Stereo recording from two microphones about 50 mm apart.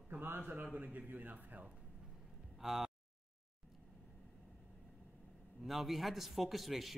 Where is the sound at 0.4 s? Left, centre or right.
Right.